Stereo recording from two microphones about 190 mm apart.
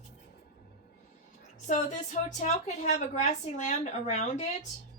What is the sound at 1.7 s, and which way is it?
A woman's voice, 40° left (ahead or behind).